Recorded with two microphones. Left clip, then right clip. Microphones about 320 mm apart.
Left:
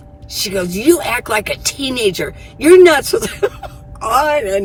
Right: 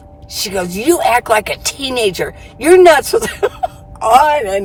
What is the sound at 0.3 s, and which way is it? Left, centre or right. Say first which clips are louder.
Speech: even; centre.